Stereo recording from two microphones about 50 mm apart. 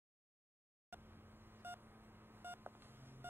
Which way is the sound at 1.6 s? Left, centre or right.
Right.